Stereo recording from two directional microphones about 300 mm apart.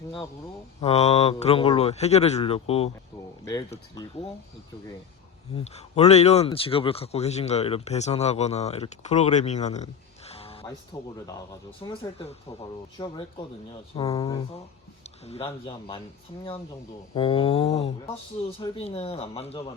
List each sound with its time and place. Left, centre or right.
0.8 s speech: left
5.5 s a man's voice: left
17.2 s speech: centre